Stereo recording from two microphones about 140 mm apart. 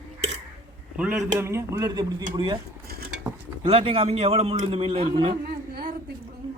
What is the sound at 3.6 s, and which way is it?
Speech, 40° right (ahead or behind).